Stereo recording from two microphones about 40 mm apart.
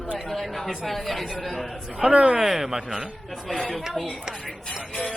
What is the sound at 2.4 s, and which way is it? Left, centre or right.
Speech, centre.